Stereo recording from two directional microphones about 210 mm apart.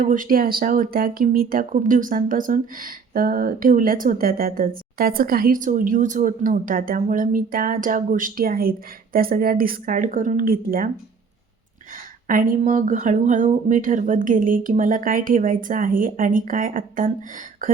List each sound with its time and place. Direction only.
0.0 s speech: 40° right (ahead or behind)
12.3 s speech: 40° right (ahead or behind)